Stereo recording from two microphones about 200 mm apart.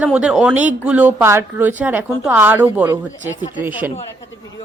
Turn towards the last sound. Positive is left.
turn(degrees=-10)  # may be behind; listen again after turning